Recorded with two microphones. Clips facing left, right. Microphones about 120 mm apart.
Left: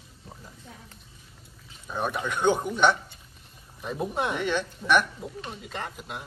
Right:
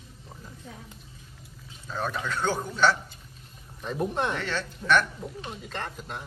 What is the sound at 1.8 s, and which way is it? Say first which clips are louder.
Speech: left 2 dB; 15° left (ahead or behind).